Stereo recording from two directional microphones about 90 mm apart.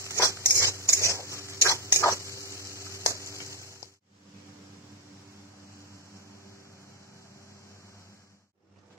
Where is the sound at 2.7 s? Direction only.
35° right (ahead or behind).